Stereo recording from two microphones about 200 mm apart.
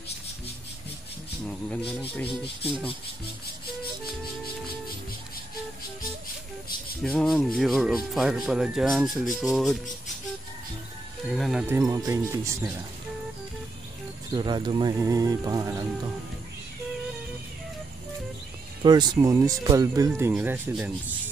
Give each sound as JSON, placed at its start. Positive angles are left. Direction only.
{"t": 2.2, "sound": "speech", "side_deg": 30}
{"t": 7.0, "sound": "speech", "side_deg": 5}
{"t": 11.2, "sound": "speech", "side_deg": 0}
{"t": 11.7, "sound": "speech", "side_deg": -15}
{"t": 14.3, "sound": "speech", "side_deg": -20}
{"t": 18.8, "sound": "speech", "side_deg": -20}